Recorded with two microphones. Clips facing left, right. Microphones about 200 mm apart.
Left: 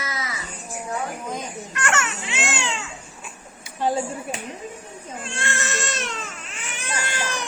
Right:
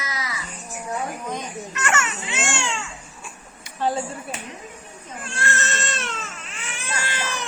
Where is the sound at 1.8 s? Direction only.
5° right (ahead or behind).